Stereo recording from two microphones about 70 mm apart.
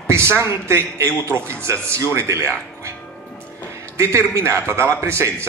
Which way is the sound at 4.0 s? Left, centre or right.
Right.